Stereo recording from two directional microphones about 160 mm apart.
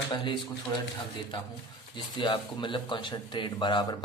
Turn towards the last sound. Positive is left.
turn(degrees=30)  # may be behind; listen again after turning